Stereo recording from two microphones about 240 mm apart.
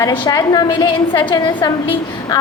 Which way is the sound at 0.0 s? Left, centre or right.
Centre.